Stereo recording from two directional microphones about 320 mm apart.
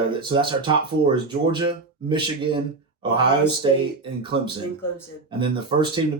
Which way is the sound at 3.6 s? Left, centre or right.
Centre.